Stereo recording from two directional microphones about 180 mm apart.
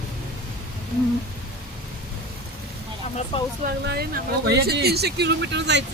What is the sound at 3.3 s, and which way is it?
Speech, 30° left (ahead or behind).